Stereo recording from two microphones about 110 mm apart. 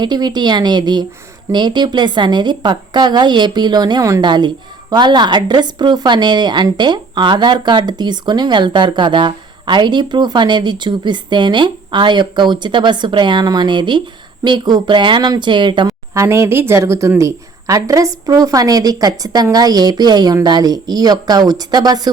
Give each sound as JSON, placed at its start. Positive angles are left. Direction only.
{"t": 0.0, "sound": "a woman's voice", "side_deg": -40}
{"t": 15.9, "sound": "speech", "side_deg": -25}